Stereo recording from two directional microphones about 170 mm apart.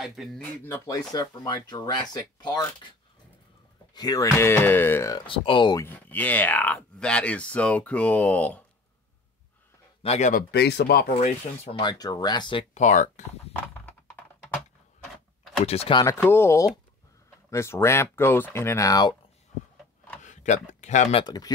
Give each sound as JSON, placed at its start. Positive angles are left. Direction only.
{"t": 0.0, "sound": "speech", "side_deg": 0}
{"t": 0.7, "sound": "speech", "side_deg": 15}
{"t": 3.9, "sound": "speech", "side_deg": 20}
{"t": 5.2, "sound": "speech", "side_deg": 30}
{"t": 5.8, "sound": "speech", "side_deg": 10}
{"t": 10.0, "sound": "speech", "side_deg": 40}
{"t": 10.5, "sound": "speech", "side_deg": 75}
{"t": 11.1, "sound": "speech", "side_deg": 35}
{"t": 12.7, "sound": "speech", "side_deg": 45}
{"t": 15.6, "sound": "speech", "side_deg": 35}
{"t": 16.0, "sound": "speech", "side_deg": 15}
{"t": 20.2, "sound": "a sound", "side_deg": 45}
{"t": 21.2, "sound": "speech", "side_deg": 25}